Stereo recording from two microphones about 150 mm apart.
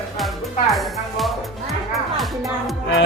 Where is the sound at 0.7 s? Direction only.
Centre (ahead or behind).